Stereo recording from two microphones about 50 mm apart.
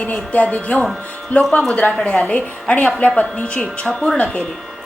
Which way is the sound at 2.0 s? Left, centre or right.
Left.